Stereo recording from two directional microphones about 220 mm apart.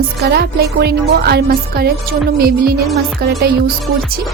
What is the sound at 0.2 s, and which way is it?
Speech, 50° right (ahead or behind).